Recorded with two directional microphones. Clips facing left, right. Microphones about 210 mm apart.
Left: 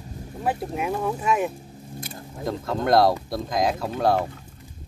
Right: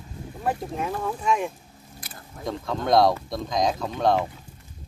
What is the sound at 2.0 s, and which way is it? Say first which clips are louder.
Vehicle: left 7 dB; 25° left (ahead or behind).